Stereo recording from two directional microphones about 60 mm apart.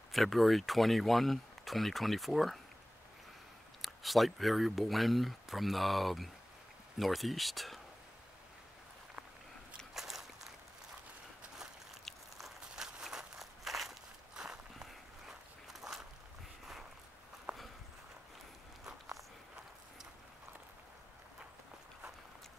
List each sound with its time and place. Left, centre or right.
0.1 s speech: centre
3.8 s speech: centre
9.9 s boat: centre
11.5 s boat: centre
12.0 s a sound: centre
14.3 s walk: centre
17.5 s walk: centre
18.9 s walk: centre